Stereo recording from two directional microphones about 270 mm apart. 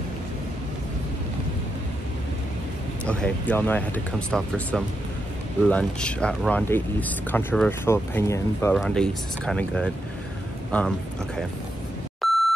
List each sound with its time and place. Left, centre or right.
3.1 s speech: centre
12.2 s beep: centre